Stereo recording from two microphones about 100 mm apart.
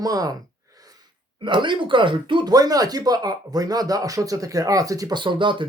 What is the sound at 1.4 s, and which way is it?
Speech, 55° right (ahead or behind).